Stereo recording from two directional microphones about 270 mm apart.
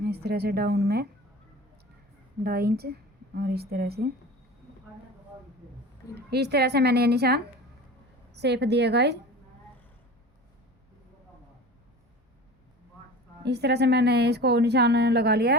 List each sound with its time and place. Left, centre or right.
0.0 s speech: right
2.4 s speech: right
6.1 s speech: right
13.4 s speech: right